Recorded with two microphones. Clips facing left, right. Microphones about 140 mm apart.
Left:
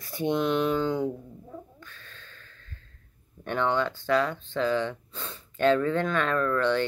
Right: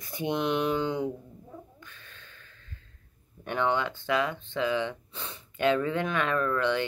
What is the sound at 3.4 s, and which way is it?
Speech, 15° right (ahead or behind).